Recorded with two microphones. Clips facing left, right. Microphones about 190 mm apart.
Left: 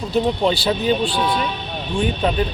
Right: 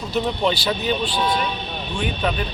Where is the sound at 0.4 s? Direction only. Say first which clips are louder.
Left 3 dB; 30° left (ahead or behind).